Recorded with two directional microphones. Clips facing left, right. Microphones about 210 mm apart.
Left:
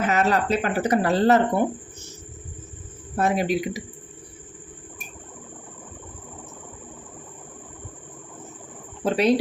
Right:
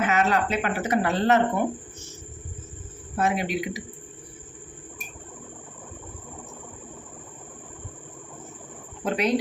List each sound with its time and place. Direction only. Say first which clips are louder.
0.0 s speech: left 1 dB; 35° left (ahead or behind)
3.2 s speech: left 3 dB; 40° left (ahead or behind)
9.0 s cricket: left 4 dB; 35° left (ahead or behind)